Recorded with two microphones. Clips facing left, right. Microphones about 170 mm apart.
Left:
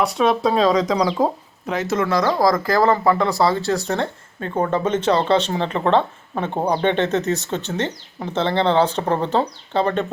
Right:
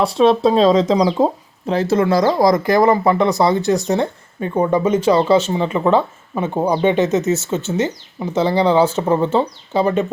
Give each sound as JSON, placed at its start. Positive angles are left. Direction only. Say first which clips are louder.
{"t": 0.0, "sound": "speech", "louder": "right 5 dB", "side_deg": -25}